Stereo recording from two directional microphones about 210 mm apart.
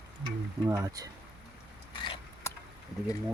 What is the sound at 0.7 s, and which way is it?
Speech, 15° right (ahead or behind).